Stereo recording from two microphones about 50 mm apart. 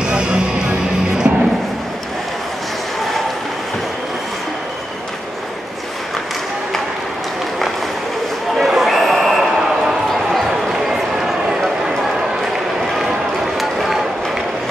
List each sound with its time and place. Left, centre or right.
0.0 s music: centre
8.5 s a sound: centre
10.7 s run: centre
13.6 s run: centre